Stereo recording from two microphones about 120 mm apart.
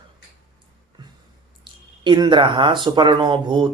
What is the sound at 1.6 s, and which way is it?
Speech, 40° right (ahead or behind).